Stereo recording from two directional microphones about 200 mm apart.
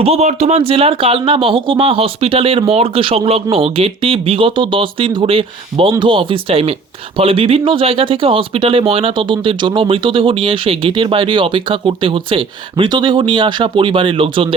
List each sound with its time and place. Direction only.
0.0 s speech: 30° right (ahead or behind)